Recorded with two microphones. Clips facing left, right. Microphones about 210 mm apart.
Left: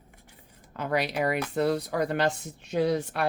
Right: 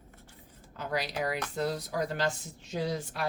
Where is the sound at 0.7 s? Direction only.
60° left (ahead or behind).